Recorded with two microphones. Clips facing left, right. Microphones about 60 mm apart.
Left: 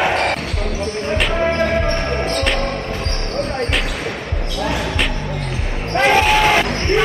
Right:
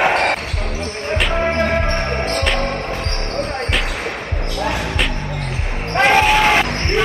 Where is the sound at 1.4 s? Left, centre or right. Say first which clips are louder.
Left 2 dB; right.